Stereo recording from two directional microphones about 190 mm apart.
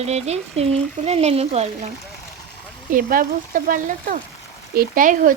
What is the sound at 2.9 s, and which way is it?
Speech, 45° right (ahead or behind).